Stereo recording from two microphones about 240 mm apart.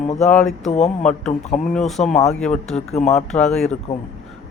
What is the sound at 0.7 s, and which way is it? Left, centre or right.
Speech, left.